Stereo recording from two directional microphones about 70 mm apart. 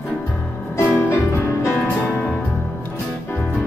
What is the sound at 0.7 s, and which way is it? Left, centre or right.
Music, left.